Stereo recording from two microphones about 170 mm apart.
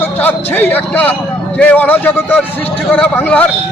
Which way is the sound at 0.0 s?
10° left (ahead or behind).